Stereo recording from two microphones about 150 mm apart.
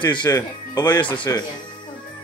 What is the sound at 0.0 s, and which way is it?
Speech, 30° left (ahead or behind).